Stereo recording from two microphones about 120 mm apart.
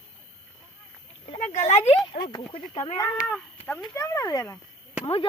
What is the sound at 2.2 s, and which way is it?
Speech, 90° left.